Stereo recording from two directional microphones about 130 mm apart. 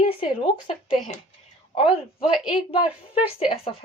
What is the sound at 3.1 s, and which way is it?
Speech, 10° right (ahead or behind).